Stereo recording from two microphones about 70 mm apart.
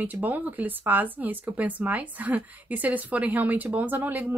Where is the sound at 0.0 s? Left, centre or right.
Right.